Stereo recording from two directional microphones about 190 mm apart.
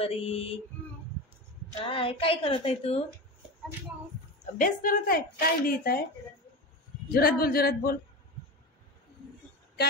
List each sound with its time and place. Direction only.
0.0 s a sound: 30° left (ahead or behind)
1.9 s a woman's voice: 30° left (ahead or behind)
4.6 s speech: 50° left (ahead or behind)
7.1 s speech: 50° left (ahead or behind)